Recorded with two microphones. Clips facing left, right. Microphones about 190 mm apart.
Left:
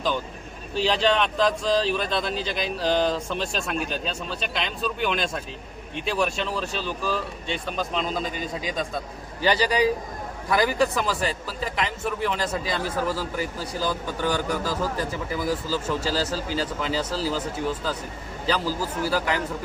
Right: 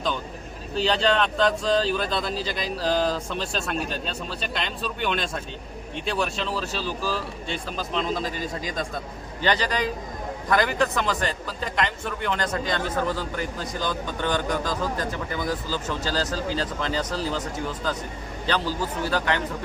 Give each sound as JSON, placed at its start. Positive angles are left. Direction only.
{"t": 0.7, "sound": "speech", "side_deg": 0}
{"t": 9.4, "sound": "a man's voice", "side_deg": 10}